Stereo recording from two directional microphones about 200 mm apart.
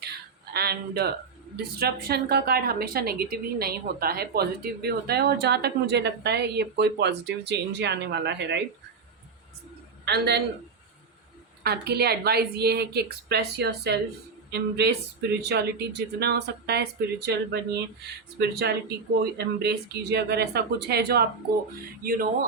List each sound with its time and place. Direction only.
0.0 s a sound: 55° right (ahead or behind)
1.5 s a woman's voice: 50° right (ahead or behind)
10.1 s speech: 55° right (ahead or behind)
11.6 s a woman's voice: 55° right (ahead or behind)